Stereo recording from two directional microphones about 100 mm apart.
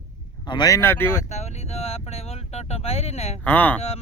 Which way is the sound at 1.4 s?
90° left.